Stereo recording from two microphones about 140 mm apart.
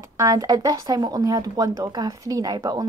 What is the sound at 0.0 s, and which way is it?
Speech, 25° right (ahead or behind).